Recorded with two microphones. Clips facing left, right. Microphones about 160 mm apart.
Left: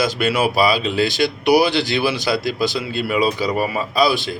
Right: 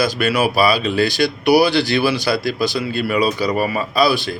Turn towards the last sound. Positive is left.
turn(degrees=20)  # may be behind; listen again after turning